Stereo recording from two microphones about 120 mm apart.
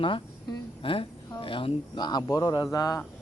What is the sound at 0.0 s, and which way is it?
A woman's voice, 45° left (ahead or behind).